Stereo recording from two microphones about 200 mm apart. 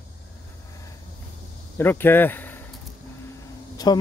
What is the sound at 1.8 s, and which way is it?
Speech, 10° left (ahead or behind).